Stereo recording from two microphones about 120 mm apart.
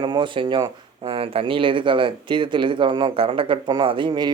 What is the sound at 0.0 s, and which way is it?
Speech, 40° right (ahead or behind).